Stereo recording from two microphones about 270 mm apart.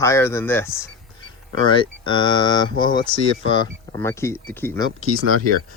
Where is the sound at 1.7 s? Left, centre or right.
Centre.